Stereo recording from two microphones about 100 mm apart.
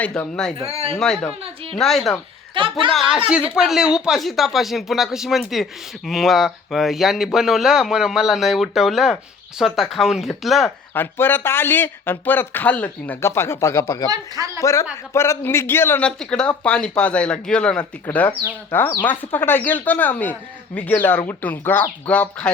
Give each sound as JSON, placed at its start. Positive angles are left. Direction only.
{"t": 0.6, "sound": "speech", "side_deg": -85}
{"t": 0.9, "sound": "speech", "side_deg": 5}
{"t": 2.6, "sound": "a woman's voice", "side_deg": -60}
{"t": 2.9, "sound": "speech", "side_deg": 0}
{"t": 3.2, "sound": "speech", "side_deg": -10}
{"t": 10.9, "sound": "speech", "side_deg": 20}
{"t": 13.2, "sound": "speech", "side_deg": 25}
{"t": 14.1, "sound": "speech", "side_deg": -35}
{"t": 14.6, "sound": "speech", "side_deg": 30}
{"t": 16.0, "sound": "speech", "side_deg": 10}